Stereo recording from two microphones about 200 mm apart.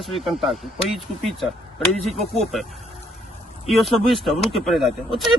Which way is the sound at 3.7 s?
Centre (ahead or behind).